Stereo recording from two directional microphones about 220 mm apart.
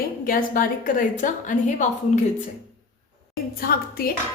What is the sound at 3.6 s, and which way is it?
Speech, 45° left (ahead or behind).